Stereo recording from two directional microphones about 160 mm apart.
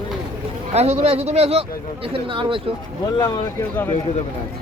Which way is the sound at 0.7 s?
40° right (ahead or behind).